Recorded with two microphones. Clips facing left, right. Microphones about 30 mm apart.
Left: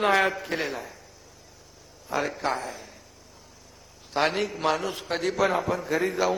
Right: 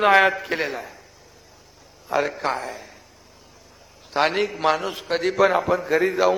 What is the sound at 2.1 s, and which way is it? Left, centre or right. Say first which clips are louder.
Speech: right 4 dB; centre.